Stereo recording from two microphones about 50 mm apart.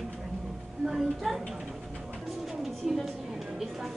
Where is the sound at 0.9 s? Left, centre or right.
Centre.